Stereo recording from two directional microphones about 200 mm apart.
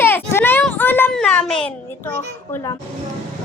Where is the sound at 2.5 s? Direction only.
15° left (ahead or behind).